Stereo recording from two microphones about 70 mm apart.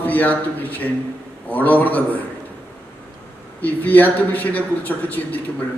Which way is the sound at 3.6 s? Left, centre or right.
Left.